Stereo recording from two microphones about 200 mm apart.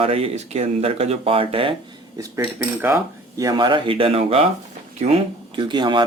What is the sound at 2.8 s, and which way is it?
Speech, 15° right (ahead or behind).